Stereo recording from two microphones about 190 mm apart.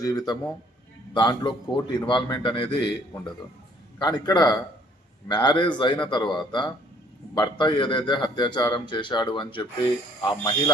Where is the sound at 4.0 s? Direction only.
20° left (ahead or behind).